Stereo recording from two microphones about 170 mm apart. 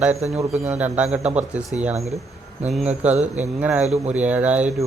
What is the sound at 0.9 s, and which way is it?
Speech, 5° right (ahead or behind).